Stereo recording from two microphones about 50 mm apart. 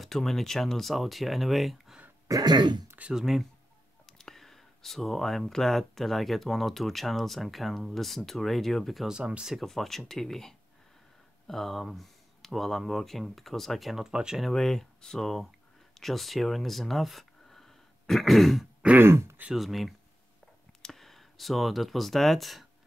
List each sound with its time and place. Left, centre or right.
0.0 s speech: centre
3.1 s speech: centre
4.0 s speech: centre
9.0 s speech: centre
9.7 s speech: centre
14.0 s speech: centre
14.4 s speech: centre
18.9 s speech: right
19.5 s speech: centre